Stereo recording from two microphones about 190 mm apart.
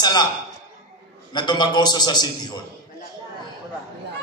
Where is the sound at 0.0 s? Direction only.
20° left (ahead or behind).